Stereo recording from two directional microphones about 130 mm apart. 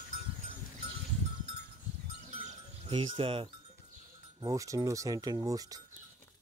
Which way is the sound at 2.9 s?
40° right (ahead or behind).